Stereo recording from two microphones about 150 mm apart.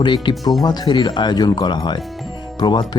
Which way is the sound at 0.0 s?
30° left (ahead or behind).